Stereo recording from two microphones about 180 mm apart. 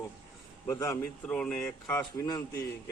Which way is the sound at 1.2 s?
5° left (ahead or behind).